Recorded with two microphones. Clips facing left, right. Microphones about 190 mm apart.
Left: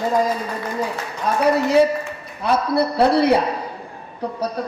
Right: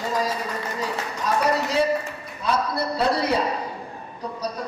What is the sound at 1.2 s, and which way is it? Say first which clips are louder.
Speech: left 5 dB; 55° left (ahead or behind).